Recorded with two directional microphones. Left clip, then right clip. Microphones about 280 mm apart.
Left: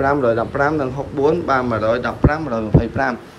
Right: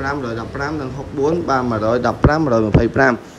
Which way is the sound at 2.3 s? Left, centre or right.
Right.